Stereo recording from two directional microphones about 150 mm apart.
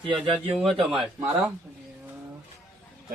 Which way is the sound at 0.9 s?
Centre (ahead or behind).